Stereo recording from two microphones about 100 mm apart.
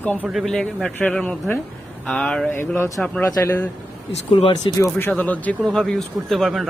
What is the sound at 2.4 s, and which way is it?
Speech, 20° left (ahead or behind).